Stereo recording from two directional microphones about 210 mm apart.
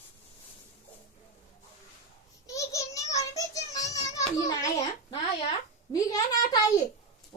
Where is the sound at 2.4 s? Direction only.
15° left (ahead or behind).